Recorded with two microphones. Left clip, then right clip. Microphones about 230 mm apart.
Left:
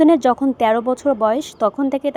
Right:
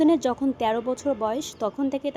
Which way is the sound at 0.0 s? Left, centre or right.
Left.